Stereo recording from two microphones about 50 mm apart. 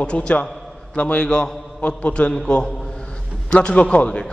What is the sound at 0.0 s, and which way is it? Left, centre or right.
A man's voice, left.